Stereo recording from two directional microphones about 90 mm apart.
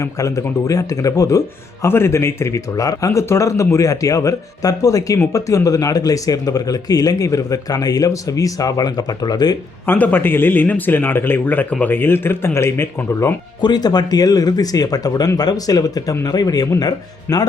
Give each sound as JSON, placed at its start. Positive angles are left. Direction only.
{"t": 0.0, "sound": "speech", "side_deg": 35}
{"t": 9.8, "sound": "speech", "side_deg": 20}
{"t": 13.6, "sound": "speech", "side_deg": 50}